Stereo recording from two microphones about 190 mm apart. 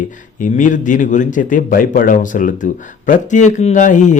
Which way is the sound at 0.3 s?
45° left (ahead or behind).